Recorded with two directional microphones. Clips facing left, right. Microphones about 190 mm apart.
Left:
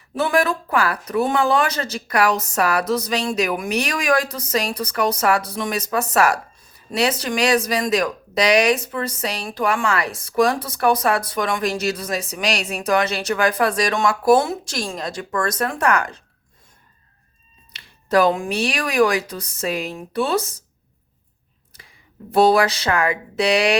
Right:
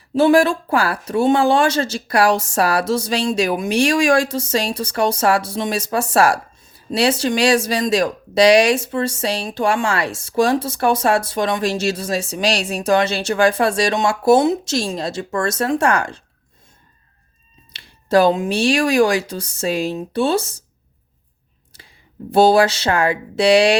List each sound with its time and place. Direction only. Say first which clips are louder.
0.1 s speech: right 6 dB; 30° right (ahead or behind)
17.7 s speech: right 3 dB; 30° right (ahead or behind)
22.3 s a sound: right 3 dB; 30° right (ahead or behind)